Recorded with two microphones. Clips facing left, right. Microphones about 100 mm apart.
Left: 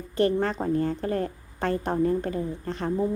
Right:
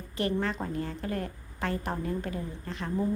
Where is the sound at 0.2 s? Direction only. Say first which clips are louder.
Left 6 dB; 40° left (ahead or behind).